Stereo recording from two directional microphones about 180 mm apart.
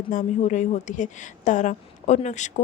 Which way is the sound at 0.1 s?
45° left (ahead or behind).